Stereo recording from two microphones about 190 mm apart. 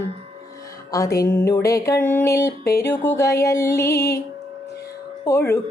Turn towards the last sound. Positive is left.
turn(degrees=15)  # may be behind; listen again after turning